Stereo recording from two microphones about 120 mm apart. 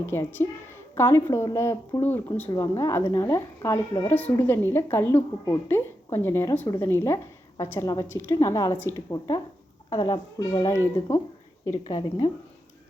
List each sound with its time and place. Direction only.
0.0 s a woman's voice: 20° left (ahead or behind)
2.5 s a woman's voice: 30° left (ahead or behind)
11.9 s speech: 40° left (ahead or behind)